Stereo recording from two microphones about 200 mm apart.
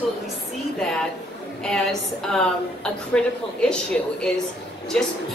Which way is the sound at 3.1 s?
5° left (ahead or behind).